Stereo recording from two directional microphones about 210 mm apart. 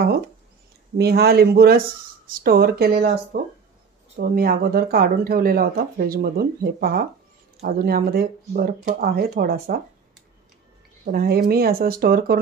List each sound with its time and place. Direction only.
0.9 s speech: 50° right (ahead or behind)
11.1 s speech: 45° right (ahead or behind)